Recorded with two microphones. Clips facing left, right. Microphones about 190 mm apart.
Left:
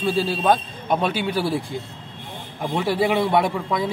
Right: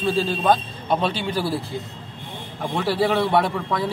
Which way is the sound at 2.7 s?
15° left (ahead or behind).